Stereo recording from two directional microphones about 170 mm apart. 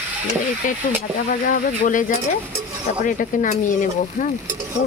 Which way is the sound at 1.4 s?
50° left (ahead or behind).